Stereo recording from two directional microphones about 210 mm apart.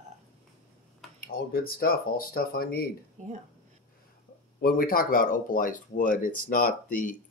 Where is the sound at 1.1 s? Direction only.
45° left (ahead or behind).